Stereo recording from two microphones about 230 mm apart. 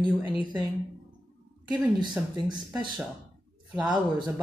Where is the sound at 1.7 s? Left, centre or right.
Centre.